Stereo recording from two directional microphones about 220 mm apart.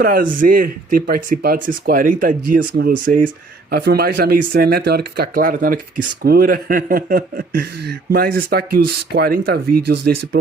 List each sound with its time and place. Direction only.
0.0 s speech: 40° right (ahead or behind)